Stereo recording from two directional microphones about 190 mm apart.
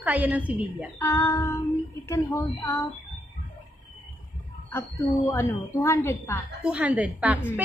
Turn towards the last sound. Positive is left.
turn(degrees=-10)  # may be behind; listen again after turning